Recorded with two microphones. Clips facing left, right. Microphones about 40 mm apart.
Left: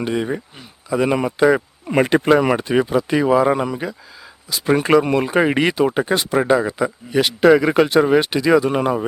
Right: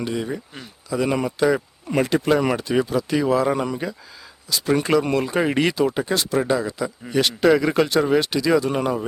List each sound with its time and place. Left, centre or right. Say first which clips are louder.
0.0 s speech: left 4 dB; left
2.0 s speech: left 5 dB; left; by 3.9 s centre
4.4 s speech: left 3 dB; left
7.1 s speech: left 4 dB; centre